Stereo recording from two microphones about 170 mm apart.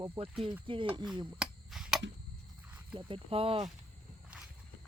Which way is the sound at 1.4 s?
5° right (ahead or behind).